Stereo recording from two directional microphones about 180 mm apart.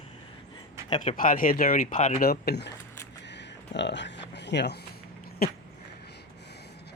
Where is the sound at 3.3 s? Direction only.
75° left (ahead or behind).